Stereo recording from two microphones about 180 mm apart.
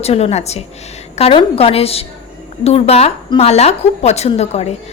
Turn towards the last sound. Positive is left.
turn(degrees=35)  # may be behind; listen again after turning